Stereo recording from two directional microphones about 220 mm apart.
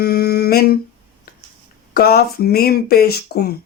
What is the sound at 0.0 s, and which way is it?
Humming, 45° left (ahead or behind).